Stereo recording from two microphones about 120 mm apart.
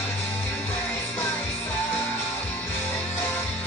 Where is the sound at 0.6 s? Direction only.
15° left (ahead or behind).